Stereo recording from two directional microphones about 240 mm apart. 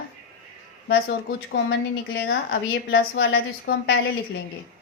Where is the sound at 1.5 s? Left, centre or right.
Left.